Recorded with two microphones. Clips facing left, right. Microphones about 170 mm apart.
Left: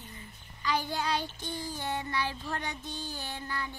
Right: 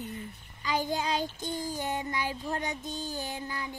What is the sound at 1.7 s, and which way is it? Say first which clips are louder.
Speech: right 1 dB; 15° right (ahead or behind).